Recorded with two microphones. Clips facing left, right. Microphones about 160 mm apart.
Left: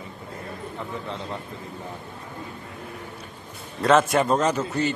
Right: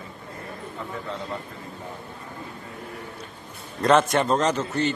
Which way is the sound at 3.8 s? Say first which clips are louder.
Even; 5° left (ahead or behind).